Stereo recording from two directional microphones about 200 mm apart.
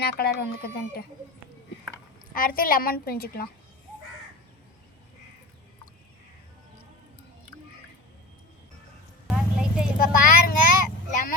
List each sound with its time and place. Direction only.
0.0 s a woman's voice: 50° left (ahead or behind)
2.3 s a woman's voice: 45° left (ahead or behind)
9.2 s clip-clop: 5° right (ahead or behind)
10.0 s a sound: 45° left (ahead or behind)